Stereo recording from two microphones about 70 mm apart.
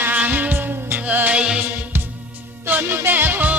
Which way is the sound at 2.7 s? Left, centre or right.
Right.